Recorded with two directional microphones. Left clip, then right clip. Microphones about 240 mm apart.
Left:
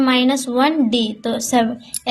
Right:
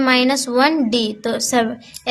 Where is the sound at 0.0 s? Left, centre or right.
Centre.